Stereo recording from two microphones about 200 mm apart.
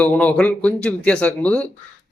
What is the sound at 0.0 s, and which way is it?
A man's voice, 5° left (ahead or behind).